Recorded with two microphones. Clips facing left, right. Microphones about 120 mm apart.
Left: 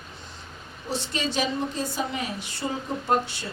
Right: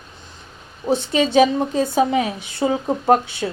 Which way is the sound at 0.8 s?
55° right (ahead or behind).